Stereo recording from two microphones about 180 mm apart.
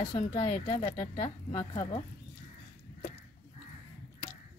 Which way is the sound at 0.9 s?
25° left (ahead or behind).